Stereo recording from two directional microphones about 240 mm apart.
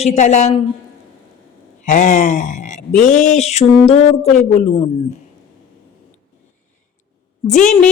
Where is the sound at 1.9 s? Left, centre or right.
Left.